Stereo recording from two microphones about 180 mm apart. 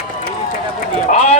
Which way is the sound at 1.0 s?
35° left (ahead or behind).